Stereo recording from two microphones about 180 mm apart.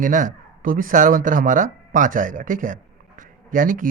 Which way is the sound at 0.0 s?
45° right (ahead or behind).